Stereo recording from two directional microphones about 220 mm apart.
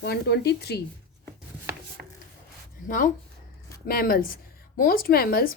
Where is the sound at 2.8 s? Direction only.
40° left (ahead or behind).